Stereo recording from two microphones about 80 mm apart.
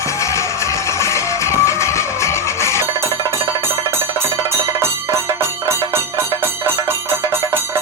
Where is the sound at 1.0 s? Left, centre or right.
Left.